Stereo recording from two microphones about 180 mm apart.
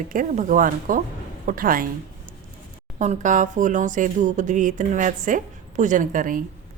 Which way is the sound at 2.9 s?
40° right (ahead or behind).